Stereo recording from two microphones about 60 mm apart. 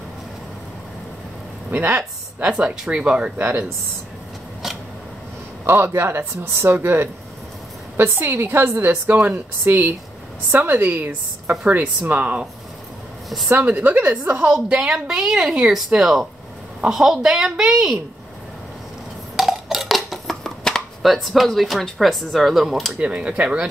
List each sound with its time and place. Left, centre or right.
1.7 s a woman's voice: right
2.5 s a woman's voice: centre
3.3 s a woman's voice: right
5.7 s a woman's voice: right
13.5 s a woman's voice: right
14.5 s a woman's voice: centre
19.3 s dishes: centre
23.0 s a woman's voice: centre